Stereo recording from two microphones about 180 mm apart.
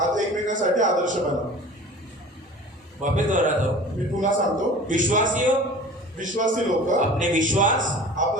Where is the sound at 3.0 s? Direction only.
45° right (ahead or behind).